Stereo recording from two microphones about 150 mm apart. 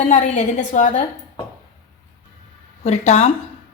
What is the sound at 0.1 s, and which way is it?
Speech, 55° left (ahead or behind).